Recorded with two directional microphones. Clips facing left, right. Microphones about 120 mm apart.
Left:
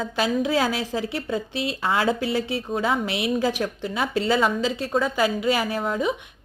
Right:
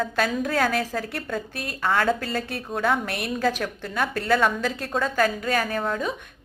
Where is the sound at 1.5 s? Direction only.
50° right (ahead or behind).